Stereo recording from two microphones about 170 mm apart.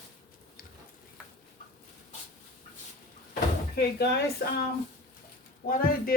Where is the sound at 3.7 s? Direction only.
75° left (ahead or behind).